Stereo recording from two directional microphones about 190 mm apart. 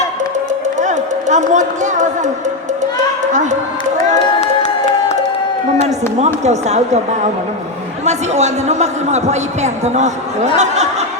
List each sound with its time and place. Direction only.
0.8 s speech: 40° right (ahead or behind)
3.3 s speech: 40° right (ahead or behind)
4.4 s music: 35° left (ahead or behind)
5.8 s a man's voice: 35° right (ahead or behind)
8.0 s a man's voice: 35° right (ahead or behind)